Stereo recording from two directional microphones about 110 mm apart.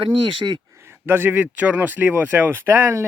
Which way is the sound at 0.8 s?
20° right (ahead or behind).